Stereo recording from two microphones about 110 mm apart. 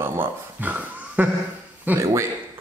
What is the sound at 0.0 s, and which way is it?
Dog, 20° right (ahead or behind).